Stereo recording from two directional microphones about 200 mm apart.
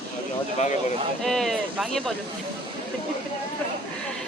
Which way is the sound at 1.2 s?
Centre (ahead or behind).